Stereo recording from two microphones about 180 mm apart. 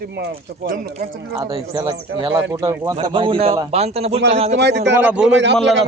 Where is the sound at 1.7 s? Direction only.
15° right (ahead or behind); by 4.5 s 35° right (ahead or behind).